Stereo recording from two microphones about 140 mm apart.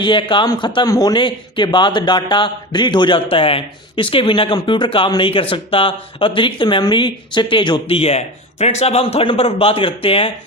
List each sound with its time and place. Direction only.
0.0 s a man's voice: 35° left (ahead or behind)